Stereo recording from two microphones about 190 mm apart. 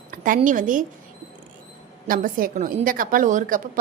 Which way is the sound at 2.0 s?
45° right (ahead or behind).